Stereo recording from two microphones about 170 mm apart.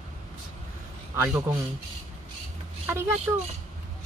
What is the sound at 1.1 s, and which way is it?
Speech, 10° right (ahead or behind).